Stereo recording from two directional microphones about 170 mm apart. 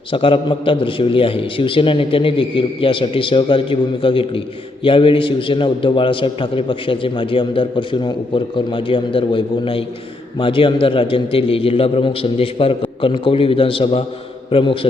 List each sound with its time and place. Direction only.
0.1 s a man's voice: 30° left (ahead or behind)